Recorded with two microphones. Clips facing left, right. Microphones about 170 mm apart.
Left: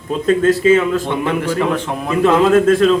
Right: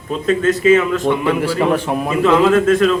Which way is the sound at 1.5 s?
10° right (ahead or behind).